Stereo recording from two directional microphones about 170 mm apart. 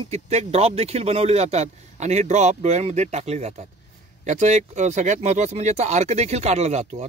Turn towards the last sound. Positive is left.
turn(degrees=-40)  # may be behind; listen again after turning